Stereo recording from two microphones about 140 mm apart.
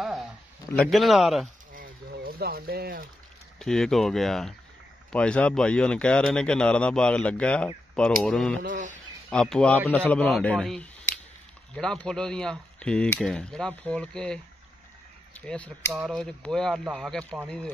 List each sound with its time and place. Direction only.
0.0 s a sound: centre (ahead or behind)
0.7 s speech: centre (ahead or behind)
1.7 s a sound: 85° right
3.5 s speech: 5° left (ahead or behind)
8.6 s speech: 65° right (ahead or behind)
9.3 s speech: 5° left (ahead or behind)